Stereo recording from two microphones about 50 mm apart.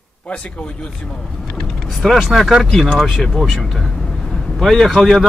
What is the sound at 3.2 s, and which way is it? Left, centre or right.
Speech, centre.